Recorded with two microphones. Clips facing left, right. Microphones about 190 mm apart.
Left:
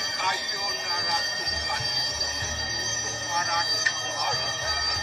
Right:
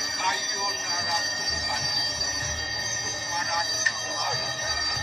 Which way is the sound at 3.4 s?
55° left (ahead or behind).